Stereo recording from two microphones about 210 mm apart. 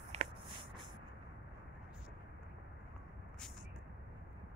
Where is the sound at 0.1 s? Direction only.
30° right (ahead or behind).